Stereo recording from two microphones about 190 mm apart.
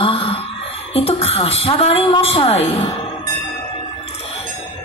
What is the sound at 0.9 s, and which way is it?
Music, 30° left (ahead or behind).